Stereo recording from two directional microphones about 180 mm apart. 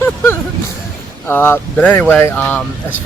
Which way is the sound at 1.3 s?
10° left (ahead or behind).